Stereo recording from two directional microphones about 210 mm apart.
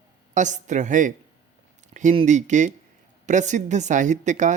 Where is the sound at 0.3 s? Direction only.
35° right (ahead or behind).